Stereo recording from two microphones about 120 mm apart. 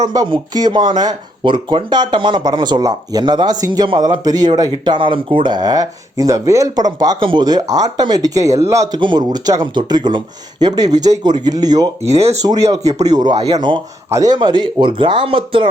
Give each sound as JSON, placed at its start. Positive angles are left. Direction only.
{"t": 0.0, "sound": "speech", "side_deg": -30}
{"t": 4.7, "sound": "speech", "side_deg": -45}
{"t": 9.0, "sound": "speech", "side_deg": -40}
{"t": 14.1, "sound": "speech", "side_deg": -30}